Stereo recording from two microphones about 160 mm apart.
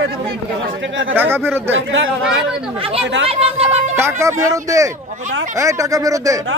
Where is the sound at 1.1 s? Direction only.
15° right (ahead or behind).